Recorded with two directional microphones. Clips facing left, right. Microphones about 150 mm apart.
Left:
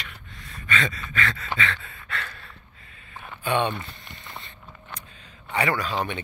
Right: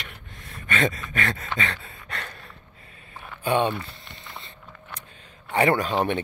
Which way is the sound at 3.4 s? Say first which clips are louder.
Right 2 dB; 35° right (ahead or behind).